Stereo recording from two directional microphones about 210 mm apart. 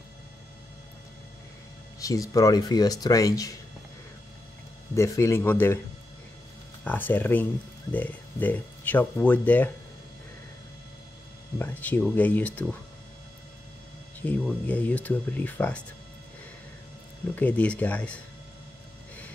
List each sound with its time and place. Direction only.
2.0 s speech: 15° left (ahead or behind)
4.9 s speech: 15° left (ahead or behind)
6.8 s speech: 10° left (ahead or behind)
11.5 s speech: 10° left (ahead or behind)
14.2 s speech: 10° left (ahead or behind)
17.4 s speech: 5° left (ahead or behind)